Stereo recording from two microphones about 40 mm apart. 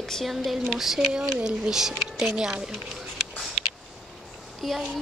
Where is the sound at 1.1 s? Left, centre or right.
Centre.